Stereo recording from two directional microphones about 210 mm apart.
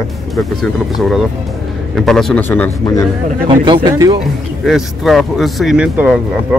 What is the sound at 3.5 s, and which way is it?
Speech, 20° right (ahead or behind).